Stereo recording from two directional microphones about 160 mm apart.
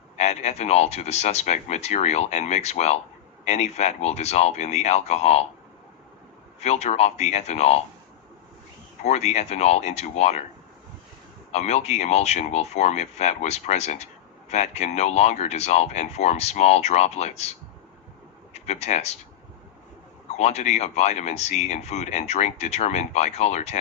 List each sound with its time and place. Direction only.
0.2 s speech: 40° left (ahead or behind)
6.6 s speech: 45° left (ahead or behind)
9.0 s speech: 45° left (ahead or behind)
11.5 s speech: 45° left (ahead or behind)
18.5 s speech: 45° left (ahead or behind)
20.3 s speech: 45° left (ahead or behind)